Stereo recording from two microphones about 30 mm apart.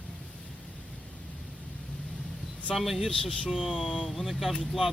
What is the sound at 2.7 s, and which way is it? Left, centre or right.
Speech, centre.